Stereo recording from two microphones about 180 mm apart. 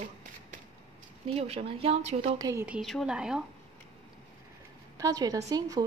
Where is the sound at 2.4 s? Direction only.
15° right (ahead or behind).